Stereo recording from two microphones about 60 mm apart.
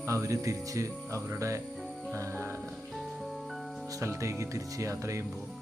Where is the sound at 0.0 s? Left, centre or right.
Right.